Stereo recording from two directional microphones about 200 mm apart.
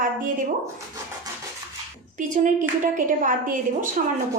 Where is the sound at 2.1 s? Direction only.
40° right (ahead or behind).